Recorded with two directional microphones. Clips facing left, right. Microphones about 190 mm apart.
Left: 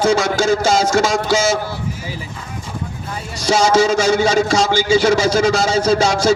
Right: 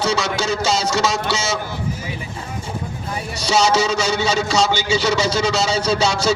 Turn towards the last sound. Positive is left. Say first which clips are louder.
# left 4 dB
turn(degrees=50)  # may be behind; listen again after turning